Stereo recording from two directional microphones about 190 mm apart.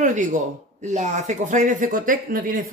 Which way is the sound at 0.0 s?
40° right (ahead or behind).